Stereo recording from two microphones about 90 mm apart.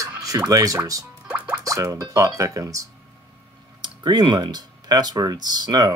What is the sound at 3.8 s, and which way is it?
Speech, 55° right (ahead or behind).